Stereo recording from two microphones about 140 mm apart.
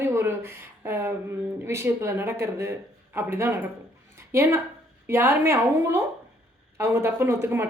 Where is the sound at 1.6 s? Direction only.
20° right (ahead or behind).